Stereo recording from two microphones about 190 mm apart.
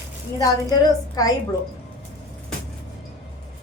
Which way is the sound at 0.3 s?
20° left (ahead or behind).